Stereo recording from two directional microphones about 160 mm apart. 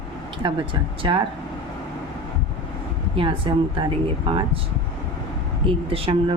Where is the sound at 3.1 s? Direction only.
35° right (ahead or behind).